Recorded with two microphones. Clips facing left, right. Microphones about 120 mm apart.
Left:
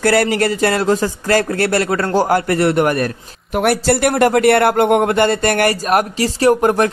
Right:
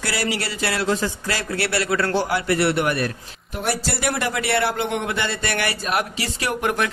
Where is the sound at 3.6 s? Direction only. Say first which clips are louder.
Left 10 dB; 60° left (ahead or behind).